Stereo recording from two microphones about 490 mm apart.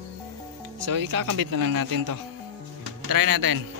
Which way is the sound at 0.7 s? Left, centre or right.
Right.